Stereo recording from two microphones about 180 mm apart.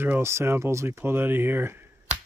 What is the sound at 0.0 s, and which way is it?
Speech, 15° right (ahead or behind).